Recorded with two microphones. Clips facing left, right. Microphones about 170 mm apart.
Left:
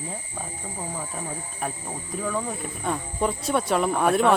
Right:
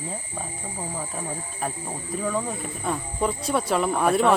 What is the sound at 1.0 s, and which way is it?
Speech, centre (ahead or behind).